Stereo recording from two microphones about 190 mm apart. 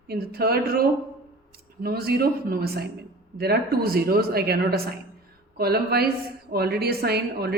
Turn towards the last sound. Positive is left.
turn(degrees=-55)  # may be behind; listen again after turning